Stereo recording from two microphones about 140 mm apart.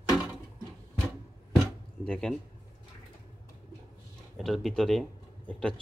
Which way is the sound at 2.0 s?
5° left (ahead or behind).